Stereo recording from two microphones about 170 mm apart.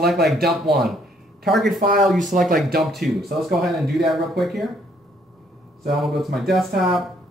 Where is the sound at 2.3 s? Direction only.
50° right (ahead or behind).